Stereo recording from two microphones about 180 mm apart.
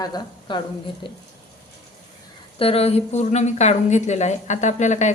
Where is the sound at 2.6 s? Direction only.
35° left (ahead or behind).